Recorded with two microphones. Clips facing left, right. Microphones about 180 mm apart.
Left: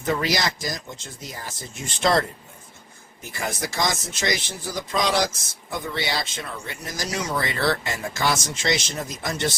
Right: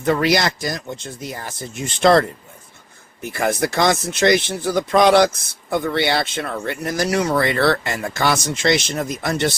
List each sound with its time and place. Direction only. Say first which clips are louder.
0.0 s speech: right 6 dB; 60° right (ahead or behind)
3.3 s speech: right 8 dB; 60° right (ahead or behind)